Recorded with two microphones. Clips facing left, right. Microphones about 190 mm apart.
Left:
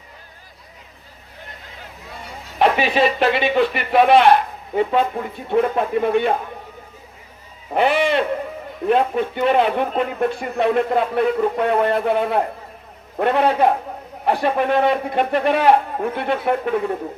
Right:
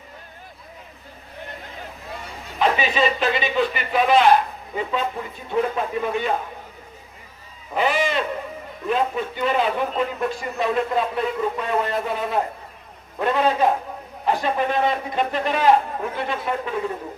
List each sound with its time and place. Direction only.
2.6 s a man's voice: 65° left (ahead or behind)
7.7 s speech: 60° left (ahead or behind)